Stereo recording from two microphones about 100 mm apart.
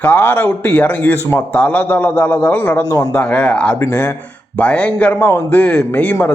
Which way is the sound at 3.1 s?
15° left (ahead or behind).